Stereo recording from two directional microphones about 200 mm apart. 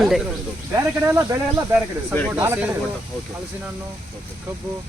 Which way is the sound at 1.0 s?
15° right (ahead or behind).